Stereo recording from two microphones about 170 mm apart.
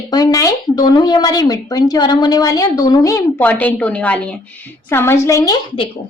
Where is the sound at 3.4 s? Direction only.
10° left (ahead or behind); by 5.9 s 25° left (ahead or behind).